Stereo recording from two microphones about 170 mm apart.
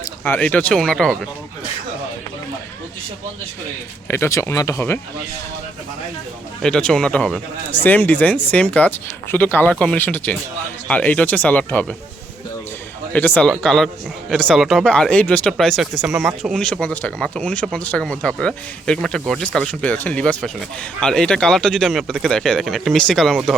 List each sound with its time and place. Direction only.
0.0 s speech: 10° left (ahead or behind)
4.1 s speech: 15° left (ahead or behind)
6.6 s speech: 5° left (ahead or behind)
13.1 s a man's voice: 10° left (ahead or behind)